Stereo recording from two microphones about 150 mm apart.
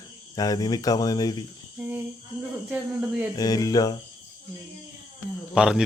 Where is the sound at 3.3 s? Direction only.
25° left (ahead or behind).